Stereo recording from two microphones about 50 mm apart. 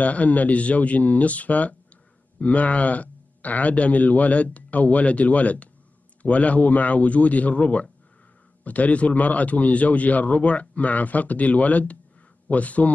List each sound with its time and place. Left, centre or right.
0.0 s a man's voice: left